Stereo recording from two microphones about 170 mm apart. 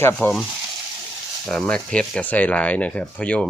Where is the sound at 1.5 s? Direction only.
5° left (ahead or behind).